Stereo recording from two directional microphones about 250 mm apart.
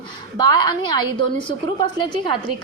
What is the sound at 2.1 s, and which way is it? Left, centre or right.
Speech, centre.